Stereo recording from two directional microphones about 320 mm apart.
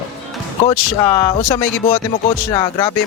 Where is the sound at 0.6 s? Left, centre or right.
Centre.